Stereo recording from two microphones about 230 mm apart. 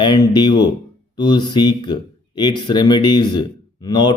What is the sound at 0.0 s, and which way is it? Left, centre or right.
Speech, centre.